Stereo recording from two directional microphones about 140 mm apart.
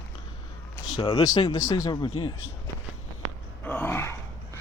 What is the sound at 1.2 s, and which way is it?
Speech, 25° left (ahead or behind).